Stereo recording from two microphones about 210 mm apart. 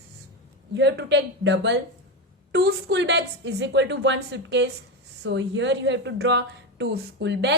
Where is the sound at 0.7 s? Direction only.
55° right (ahead or behind).